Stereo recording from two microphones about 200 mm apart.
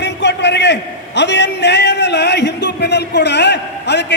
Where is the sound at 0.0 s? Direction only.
60° left (ahead or behind).